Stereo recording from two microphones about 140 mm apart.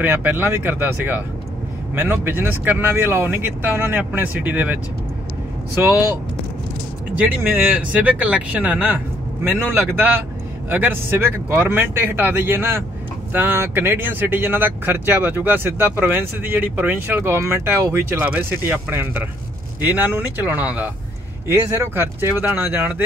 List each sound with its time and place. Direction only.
0.0 s speech: 15° right (ahead or behind)
7.9 s speech: 10° right (ahead or behind)